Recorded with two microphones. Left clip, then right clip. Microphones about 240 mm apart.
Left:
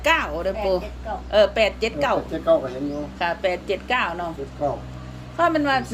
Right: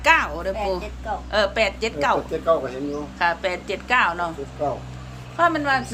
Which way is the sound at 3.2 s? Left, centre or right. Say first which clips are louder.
Right 1 dB; centre.